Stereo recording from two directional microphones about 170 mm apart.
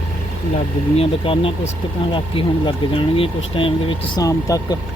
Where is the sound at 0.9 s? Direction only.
30° left (ahead or behind).